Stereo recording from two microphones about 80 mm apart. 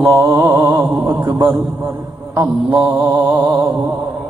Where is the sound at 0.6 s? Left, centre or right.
Right.